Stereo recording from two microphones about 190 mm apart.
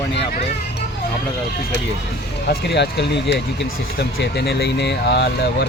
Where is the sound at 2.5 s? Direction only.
65° left (ahead or behind).